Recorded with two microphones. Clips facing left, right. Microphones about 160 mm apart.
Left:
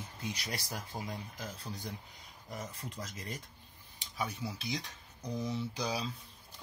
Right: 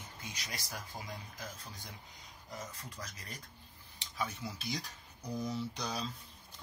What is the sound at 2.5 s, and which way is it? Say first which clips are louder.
Speech: left 3 dB; 25° left (ahead or behind).